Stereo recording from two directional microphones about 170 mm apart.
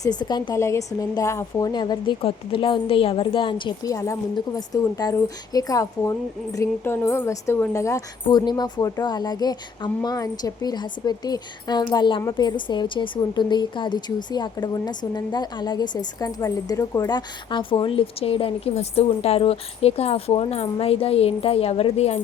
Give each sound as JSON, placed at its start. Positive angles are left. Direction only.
{"t": 0.0, "sound": "a woman's voice", "side_deg": 25}